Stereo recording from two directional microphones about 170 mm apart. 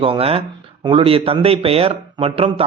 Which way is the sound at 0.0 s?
35° right (ahead or behind).